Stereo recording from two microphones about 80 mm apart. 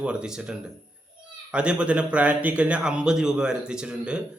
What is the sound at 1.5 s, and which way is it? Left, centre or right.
A man's voice, centre.